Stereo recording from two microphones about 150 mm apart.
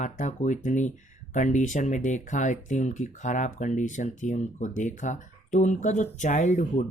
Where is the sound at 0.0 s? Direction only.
55° left (ahead or behind).